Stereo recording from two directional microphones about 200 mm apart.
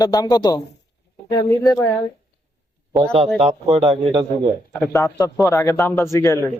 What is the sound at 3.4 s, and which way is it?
Speech, 30° right (ahead or behind).